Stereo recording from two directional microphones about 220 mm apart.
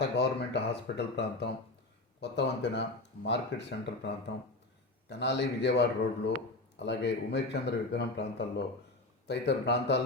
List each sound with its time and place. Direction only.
0.0 s speech: 50° left (ahead or behind)